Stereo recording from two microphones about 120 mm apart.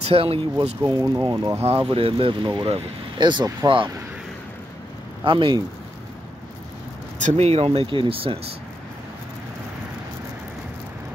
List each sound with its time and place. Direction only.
0.0 s speech: 55° right (ahead or behind)
0.8 s speech: 30° right (ahead or behind)
1.6 s speech: 55° right (ahead or behind)
5.2 s speech: 45° right (ahead or behind)
7.2 s speech: 70° right (ahead or behind); by 8.4 s 50° right (ahead or behind)